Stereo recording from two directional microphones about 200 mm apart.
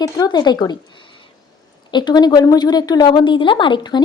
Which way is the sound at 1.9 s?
20° left (ahead or behind).